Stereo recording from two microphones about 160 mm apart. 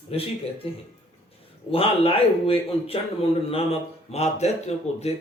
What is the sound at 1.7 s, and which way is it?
Speech, 35° left (ahead or behind).